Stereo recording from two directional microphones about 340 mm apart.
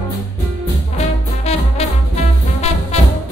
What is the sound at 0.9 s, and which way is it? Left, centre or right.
Music, centre.